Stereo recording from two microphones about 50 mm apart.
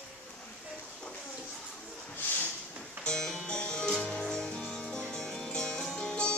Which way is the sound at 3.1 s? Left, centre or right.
Centre.